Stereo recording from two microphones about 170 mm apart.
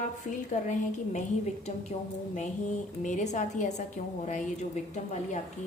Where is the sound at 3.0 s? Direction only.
45° left (ahead or behind).